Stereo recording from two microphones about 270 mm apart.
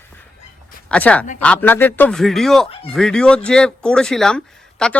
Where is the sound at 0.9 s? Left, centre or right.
Centre.